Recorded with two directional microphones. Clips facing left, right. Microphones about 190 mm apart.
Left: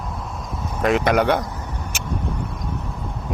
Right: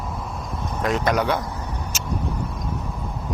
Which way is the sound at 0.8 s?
60° left (ahead or behind).